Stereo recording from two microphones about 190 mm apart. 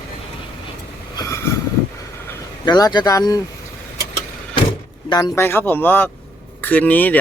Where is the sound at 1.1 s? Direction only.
15° left (ahead or behind).